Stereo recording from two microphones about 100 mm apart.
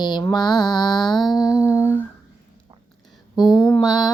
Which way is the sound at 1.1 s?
Centre (ahead or behind).